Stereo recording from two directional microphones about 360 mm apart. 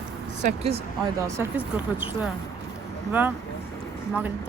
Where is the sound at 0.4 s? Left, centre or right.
Centre.